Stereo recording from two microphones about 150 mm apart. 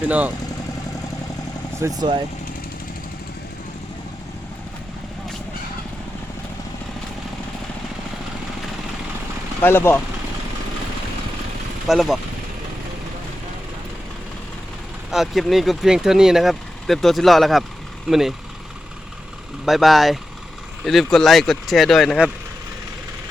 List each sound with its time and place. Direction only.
0.0 s speech: 10° right (ahead or behind)
2.0 s speech: 30° right (ahead or behind)
9.6 s speech: 15° left (ahead or behind)
11.9 s speech: centre (ahead or behind)
15.1 s speech: centre (ahead or behind)
19.6 s speech: centre (ahead or behind)